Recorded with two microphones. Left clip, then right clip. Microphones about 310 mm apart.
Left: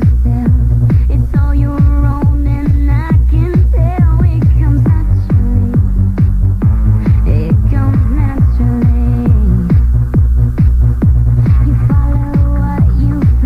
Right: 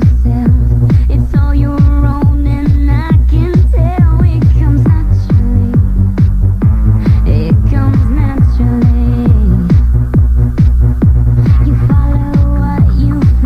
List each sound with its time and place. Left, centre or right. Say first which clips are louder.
0.0 s music: right 2 dB; right